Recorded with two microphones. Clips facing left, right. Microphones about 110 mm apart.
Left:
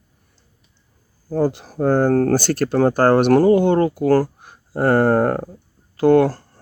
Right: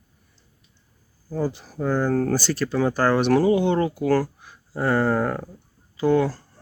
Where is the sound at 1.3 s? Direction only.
65° left (ahead or behind).